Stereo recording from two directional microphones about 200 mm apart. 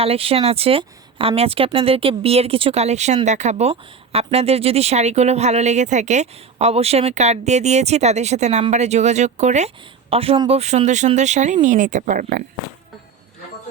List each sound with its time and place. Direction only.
0.0 s a woman's voice: 30° right (ahead or behind)